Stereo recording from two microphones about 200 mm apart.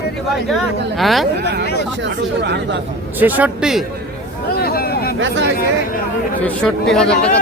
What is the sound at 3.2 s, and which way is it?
Speech, 5° right (ahead or behind).